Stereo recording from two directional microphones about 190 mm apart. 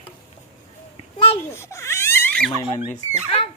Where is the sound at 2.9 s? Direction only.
30° left (ahead or behind).